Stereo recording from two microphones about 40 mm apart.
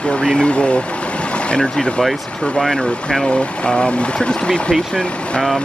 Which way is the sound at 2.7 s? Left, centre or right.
Centre.